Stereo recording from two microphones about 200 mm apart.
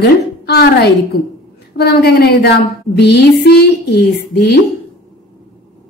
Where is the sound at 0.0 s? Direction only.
55° left (ahead or behind).